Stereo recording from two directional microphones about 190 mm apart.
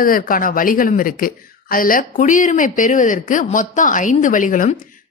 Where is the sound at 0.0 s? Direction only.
50° left (ahead or behind).